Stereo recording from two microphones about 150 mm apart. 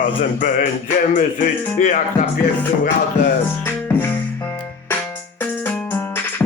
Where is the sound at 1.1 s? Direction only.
55° left (ahead or behind).